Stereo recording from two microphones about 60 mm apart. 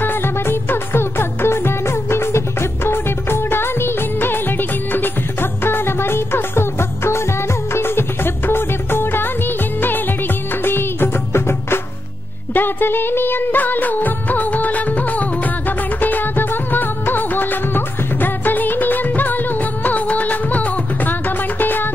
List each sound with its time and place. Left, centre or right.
0.0 s music: left